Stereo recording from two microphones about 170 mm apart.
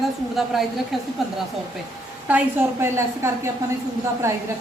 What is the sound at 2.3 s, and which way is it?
A woman's voice, 10° right (ahead or behind).